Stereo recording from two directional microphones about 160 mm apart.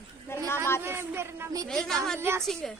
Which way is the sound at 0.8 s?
15° right (ahead or behind).